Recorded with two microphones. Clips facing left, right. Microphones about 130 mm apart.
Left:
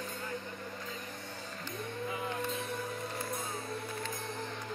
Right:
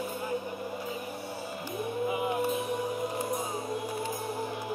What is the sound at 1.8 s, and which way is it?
Music, 15° right (ahead or behind).